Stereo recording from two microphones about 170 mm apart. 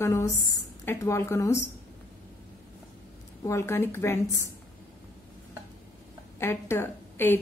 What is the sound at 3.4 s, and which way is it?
A woman's voice, 15° left (ahead or behind).